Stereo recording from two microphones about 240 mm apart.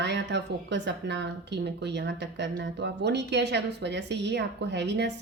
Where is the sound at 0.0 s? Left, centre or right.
Right.